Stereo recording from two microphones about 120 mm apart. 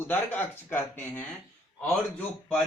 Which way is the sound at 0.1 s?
15° left (ahead or behind).